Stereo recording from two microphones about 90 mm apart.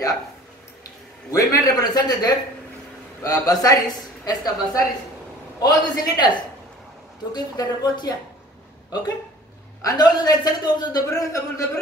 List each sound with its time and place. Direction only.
1.3 s a man's voice: 40° left (ahead or behind)
7.3 s a man's voice: 45° left (ahead or behind)
9.8 s a man's voice: 50° left (ahead or behind)